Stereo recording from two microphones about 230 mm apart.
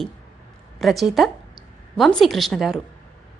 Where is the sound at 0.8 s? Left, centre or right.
Centre.